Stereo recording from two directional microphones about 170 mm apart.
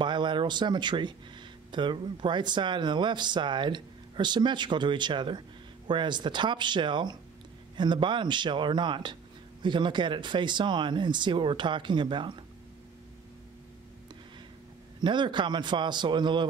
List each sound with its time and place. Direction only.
0.0 s speech: 25° right (ahead or behind)
15.0 s speech: 25° right (ahead or behind)